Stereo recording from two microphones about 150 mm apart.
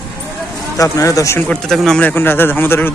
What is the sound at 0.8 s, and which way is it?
Speech, 20° left (ahead or behind).